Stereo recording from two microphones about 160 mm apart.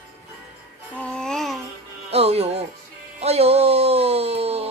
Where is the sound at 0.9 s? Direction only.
5° left (ahead or behind).